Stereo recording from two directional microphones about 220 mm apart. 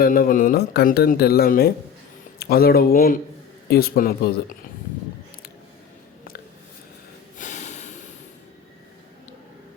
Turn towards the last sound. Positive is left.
turn(degrees=30)  # may be behind; listen again after turning